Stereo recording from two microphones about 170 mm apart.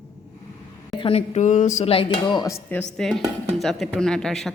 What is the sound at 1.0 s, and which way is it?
Dishes, 35° left (ahead or behind).